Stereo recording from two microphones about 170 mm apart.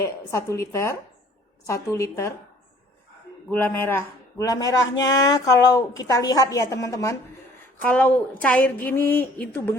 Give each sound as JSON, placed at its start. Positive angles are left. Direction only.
{"t": 0.0, "sound": "a woman's voice", "side_deg": 20}
{"t": 3.5, "sound": "a man's voice", "side_deg": 10}
{"t": 4.8, "sound": "speech", "side_deg": 90}
{"t": 5.1, "sound": "a woman's voice", "side_deg": 20}